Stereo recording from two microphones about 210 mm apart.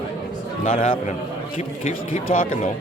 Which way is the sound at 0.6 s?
30° left (ahead or behind).